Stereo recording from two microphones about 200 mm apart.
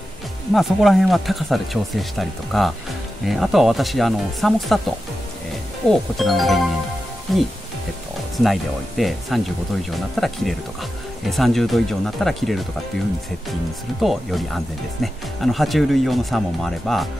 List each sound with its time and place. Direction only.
0.5 s speech: centre (ahead or behind)
5.9 s speech: centre (ahead or behind)
14.0 s speech: centre (ahead or behind)